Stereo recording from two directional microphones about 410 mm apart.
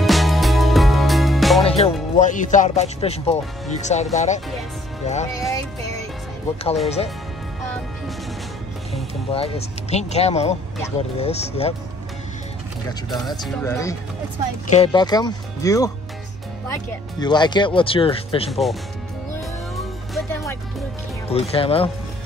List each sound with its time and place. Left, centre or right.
0.0 s music: centre
1.6 s music: centre
2.1 s speech: centre
8.9 s speech: centre
13.1 s speech: centre
17.2 s speech: centre
18.5 s speech: centre
19.7 s music: centre
21.3 s speech: centre